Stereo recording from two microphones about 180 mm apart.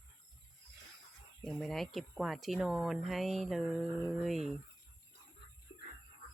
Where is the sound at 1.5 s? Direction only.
Centre (ahead or behind).